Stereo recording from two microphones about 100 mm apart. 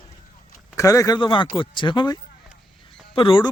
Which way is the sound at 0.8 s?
35° left (ahead or behind).